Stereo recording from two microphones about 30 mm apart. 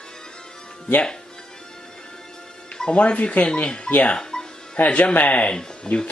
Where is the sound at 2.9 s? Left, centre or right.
Left.